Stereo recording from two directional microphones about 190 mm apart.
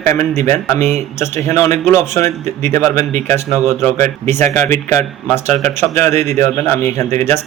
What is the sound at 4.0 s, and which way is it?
Speech, 35° right (ahead or behind).